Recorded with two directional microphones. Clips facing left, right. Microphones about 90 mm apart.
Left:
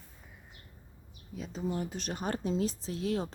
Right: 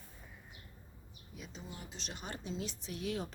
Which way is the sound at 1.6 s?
50° left (ahead or behind).